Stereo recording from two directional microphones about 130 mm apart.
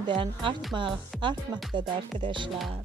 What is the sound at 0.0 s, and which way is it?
Speech, 40° right (ahead or behind).